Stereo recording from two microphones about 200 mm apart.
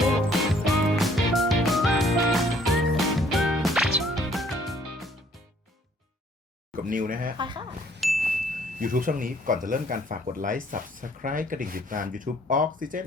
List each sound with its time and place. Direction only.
0.3 s music: centre (ahead or behind)
6.7 s speech: 40° right (ahead or behind)
7.3 s speech: 25° right (ahead or behind)
8.0 s ding: centre (ahead or behind)
8.8 s speech: 45° right (ahead or behind)